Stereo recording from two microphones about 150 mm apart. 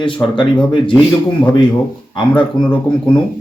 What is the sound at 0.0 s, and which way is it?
Speech, 30° left (ahead or behind).